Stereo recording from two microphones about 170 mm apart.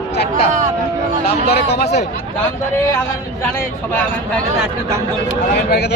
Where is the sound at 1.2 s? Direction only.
65° left (ahead or behind).